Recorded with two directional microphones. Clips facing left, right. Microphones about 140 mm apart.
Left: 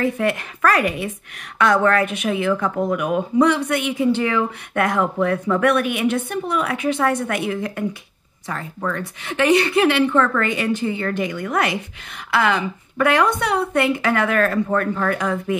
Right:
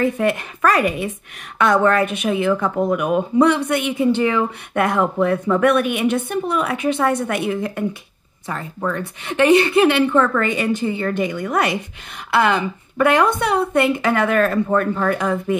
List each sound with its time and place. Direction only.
0.2 s a woman's voice: 20° right (ahead or behind)